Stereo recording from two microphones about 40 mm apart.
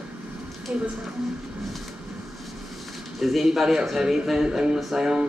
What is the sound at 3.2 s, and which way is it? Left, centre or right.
A man's voice, centre.